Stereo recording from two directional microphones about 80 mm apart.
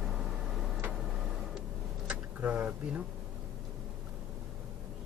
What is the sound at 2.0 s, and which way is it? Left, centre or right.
Vehicle, centre.